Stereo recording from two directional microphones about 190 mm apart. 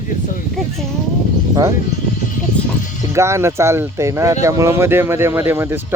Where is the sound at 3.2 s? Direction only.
15° right (ahead or behind).